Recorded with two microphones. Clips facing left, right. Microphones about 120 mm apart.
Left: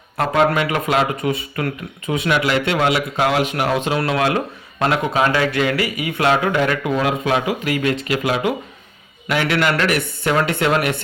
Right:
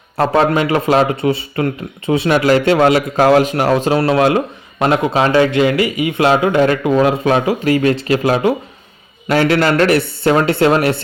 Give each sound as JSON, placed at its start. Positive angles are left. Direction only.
{"t": 0.2, "sound": "speech", "side_deg": -30}